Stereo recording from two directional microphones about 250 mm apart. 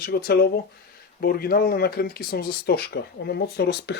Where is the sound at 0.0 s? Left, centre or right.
Left.